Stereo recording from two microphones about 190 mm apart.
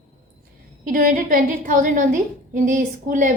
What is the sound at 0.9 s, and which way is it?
A woman's voice, 45° right (ahead or behind).